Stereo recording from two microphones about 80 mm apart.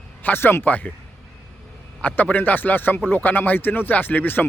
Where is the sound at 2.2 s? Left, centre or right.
Left.